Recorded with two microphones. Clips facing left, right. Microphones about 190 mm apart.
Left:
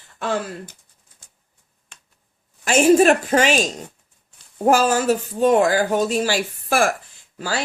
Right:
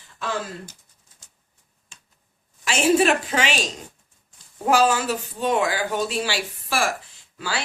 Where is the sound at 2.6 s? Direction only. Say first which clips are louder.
Left 5 dB; 45° left (ahead or behind).